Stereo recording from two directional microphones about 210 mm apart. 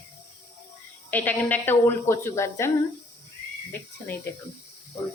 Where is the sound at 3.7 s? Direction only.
10° left (ahead or behind).